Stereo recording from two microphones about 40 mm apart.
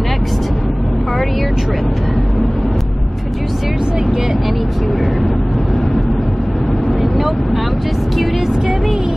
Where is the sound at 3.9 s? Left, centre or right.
Centre.